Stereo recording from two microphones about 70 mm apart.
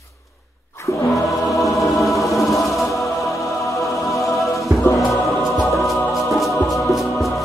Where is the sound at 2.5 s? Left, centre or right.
Left.